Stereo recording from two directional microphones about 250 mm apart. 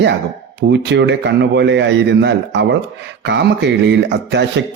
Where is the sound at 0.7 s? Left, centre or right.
Right.